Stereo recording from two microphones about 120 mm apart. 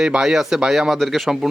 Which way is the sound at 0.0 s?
5° right (ahead or behind).